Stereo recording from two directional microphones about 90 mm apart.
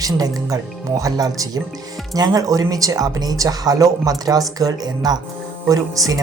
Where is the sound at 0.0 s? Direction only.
40° right (ahead or behind).